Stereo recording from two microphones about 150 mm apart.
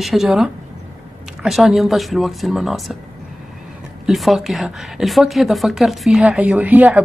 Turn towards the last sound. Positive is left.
turn(degrees=-10)  # may be behind; listen again after turning